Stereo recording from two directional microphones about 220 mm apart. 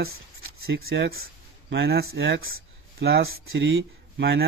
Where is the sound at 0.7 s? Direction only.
45° right (ahead or behind).